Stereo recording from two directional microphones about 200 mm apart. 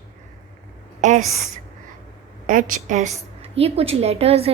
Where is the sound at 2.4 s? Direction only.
40° right (ahead or behind).